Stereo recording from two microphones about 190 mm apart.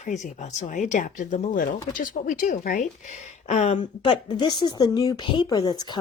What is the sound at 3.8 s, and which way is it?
A woman's voice, 25° left (ahead or behind).